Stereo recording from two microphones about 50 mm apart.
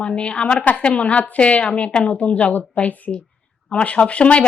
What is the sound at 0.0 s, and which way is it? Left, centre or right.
A woman's voice, left.